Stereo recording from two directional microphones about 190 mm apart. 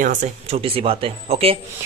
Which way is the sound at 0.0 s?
40° right (ahead or behind).